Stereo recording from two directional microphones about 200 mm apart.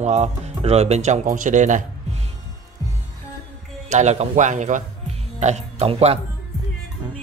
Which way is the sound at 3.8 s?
35° right (ahead or behind).